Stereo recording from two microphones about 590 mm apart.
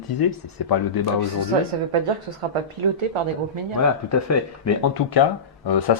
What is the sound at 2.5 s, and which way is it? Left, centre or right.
Speech, right.